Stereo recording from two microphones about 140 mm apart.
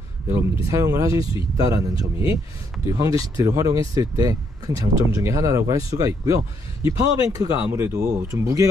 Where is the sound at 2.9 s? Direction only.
25° right (ahead or behind).